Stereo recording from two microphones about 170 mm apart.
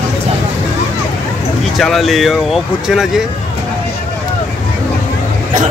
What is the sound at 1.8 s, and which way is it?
Speech, centre (ahead or behind).